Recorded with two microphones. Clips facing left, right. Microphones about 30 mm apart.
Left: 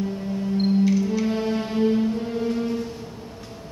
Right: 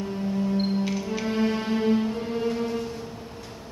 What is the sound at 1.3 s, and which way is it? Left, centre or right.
Music, centre.